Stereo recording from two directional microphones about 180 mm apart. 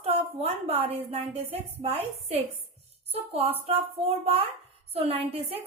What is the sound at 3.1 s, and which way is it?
A woman's voice, 35° right (ahead or behind).